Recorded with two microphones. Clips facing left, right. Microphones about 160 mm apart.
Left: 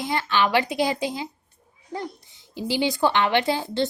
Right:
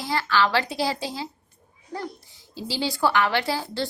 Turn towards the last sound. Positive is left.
turn(degrees=20)  # may be behind; listen again after turning